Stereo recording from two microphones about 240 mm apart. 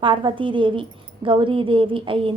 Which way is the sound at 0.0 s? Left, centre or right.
Right.